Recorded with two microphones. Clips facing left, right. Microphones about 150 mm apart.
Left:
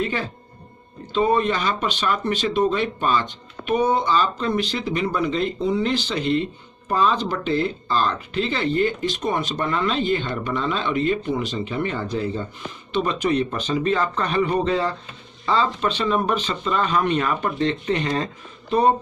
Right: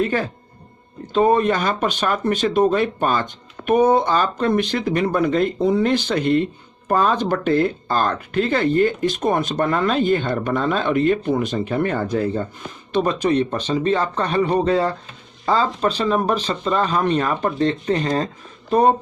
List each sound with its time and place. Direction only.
0.0 s speech: 45° right (ahead or behind)